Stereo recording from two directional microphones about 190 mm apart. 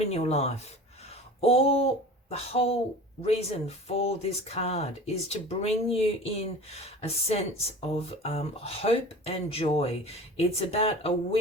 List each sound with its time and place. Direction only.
0.1 s speech: 35° left (ahead or behind)